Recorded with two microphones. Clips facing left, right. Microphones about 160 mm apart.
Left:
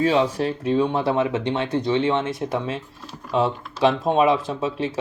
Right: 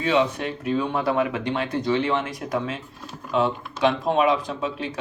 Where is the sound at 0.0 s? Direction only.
35° left (ahead or behind).